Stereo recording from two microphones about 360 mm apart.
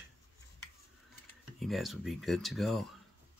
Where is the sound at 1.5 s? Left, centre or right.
Centre.